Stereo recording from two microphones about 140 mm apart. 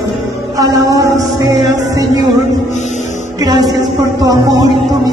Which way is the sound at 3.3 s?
25° right (ahead or behind).